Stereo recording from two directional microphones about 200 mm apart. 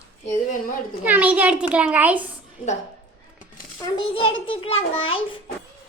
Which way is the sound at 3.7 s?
20° left (ahead or behind).